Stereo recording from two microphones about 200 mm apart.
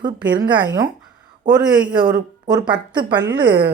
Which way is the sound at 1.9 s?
20° right (ahead or behind).